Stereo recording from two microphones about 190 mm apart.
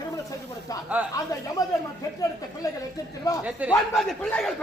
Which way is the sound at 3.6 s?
5° right (ahead or behind).